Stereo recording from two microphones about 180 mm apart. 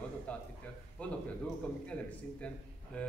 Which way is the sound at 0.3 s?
5° left (ahead or behind).